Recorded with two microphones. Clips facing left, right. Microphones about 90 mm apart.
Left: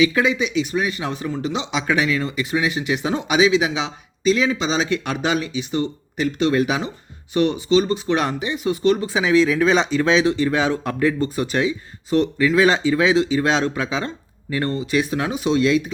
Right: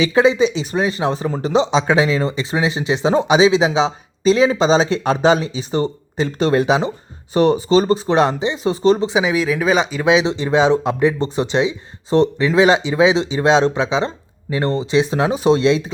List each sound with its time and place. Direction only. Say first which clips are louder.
0.0 s speech: right 4 dB; 30° right (ahead or behind)